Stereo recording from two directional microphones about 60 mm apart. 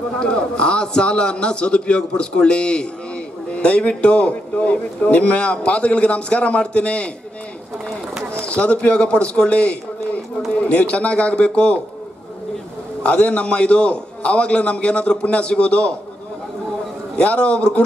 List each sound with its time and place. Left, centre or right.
0.2 s a man's voice: centre
8.5 s a man's voice: centre
13.0 s a man's voice: centre
17.2 s a man's voice: centre